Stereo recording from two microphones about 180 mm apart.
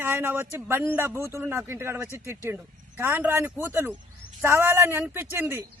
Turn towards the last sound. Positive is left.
turn(degrees=-10)  # may be behind; listen again after turning